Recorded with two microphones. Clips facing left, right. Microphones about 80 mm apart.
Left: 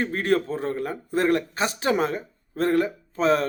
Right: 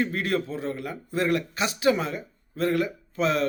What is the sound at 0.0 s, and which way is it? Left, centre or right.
Speech, left.